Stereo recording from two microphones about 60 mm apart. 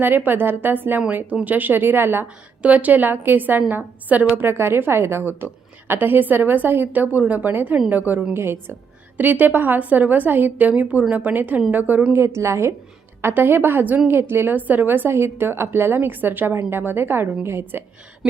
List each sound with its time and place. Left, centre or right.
0.0 s speech: right
2.2 s a woman's voice: right
4.4 s a woman's voice: right
8.3 s a woman's voice: right
9.1 s a woman's voice: right
12.1 s a woman's voice: right
13.2 s speech: right